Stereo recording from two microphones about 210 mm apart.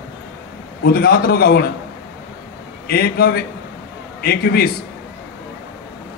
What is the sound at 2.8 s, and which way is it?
A man's voice, 50° left (ahead or behind).